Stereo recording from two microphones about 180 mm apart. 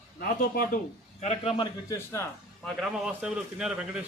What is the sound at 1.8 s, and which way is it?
Speech, 15° left (ahead or behind).